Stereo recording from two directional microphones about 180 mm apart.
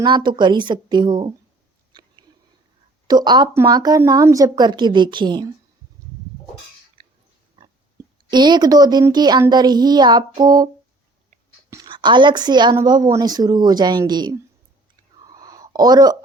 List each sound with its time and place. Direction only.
0.0 s a woman's voice: 25° right (ahead or behind)
1.9 s a sound: 25° right (ahead or behind)
3.1 s a woman's voice: 25° right (ahead or behind)
7.0 s pig: 30° right (ahead or behind)
7.5 s speech: 25° right (ahead or behind)
11.7 s a woman's voice: 25° right (ahead or behind)
15.2 s a sound: 20° right (ahead or behind)